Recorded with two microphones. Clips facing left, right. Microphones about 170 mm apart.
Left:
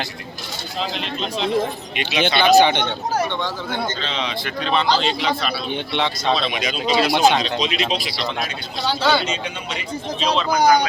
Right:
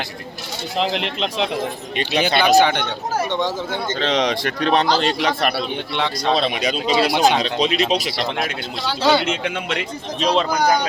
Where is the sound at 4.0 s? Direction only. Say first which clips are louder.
Right 7 dB; 70° right (ahead or behind).